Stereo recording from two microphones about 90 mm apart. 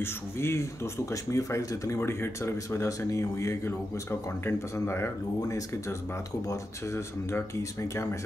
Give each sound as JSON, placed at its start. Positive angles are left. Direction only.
{"t": 0.0, "sound": "speech", "side_deg": 30}